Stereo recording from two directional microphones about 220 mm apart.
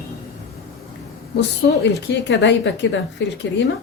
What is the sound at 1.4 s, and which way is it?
A woman's voice, 50° left (ahead or behind).